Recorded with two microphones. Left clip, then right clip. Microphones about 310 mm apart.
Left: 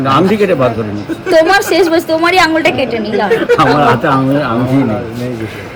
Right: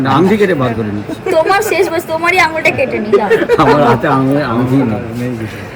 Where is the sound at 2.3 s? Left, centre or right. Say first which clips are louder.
Right 1 dB; left.